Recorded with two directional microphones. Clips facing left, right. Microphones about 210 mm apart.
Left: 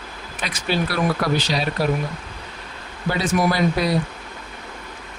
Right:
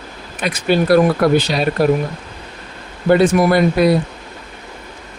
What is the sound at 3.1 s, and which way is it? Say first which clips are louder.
Speech: right 9 dB; 55° right (ahead or behind).